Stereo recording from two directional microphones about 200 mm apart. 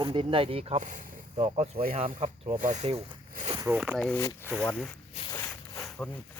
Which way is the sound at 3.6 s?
10° right (ahead or behind).